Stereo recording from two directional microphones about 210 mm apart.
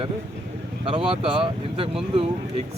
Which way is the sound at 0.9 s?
25° right (ahead or behind).